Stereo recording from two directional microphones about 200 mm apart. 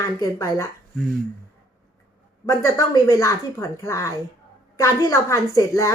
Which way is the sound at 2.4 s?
15° left (ahead or behind).